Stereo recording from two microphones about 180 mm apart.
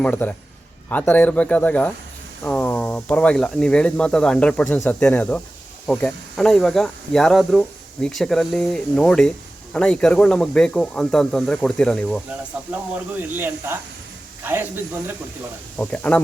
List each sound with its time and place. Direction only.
0.0 s speech: 10° left (ahead or behind)
12.7 s speech: 10° right (ahead or behind)
15.8 s speech: 10° left (ahead or behind)